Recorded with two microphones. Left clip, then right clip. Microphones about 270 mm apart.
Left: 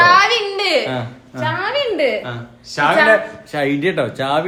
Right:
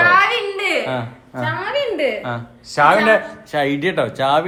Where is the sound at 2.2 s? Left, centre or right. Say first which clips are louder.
Right 3 dB; right.